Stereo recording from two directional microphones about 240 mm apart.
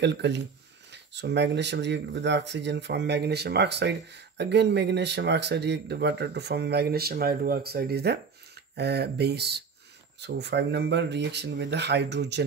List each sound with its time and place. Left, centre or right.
0.0 s speech: right